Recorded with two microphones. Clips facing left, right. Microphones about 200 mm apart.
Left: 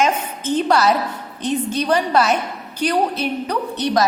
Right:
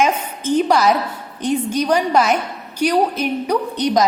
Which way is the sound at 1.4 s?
10° right (ahead or behind).